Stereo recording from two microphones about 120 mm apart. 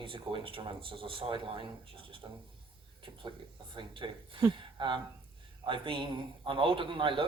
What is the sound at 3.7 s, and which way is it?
Speech, 45° right (ahead or behind).